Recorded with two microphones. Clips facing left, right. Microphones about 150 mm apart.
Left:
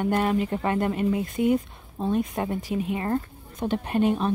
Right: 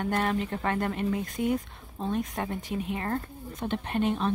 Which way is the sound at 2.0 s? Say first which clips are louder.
Left 5 dB; 10° left (ahead or behind).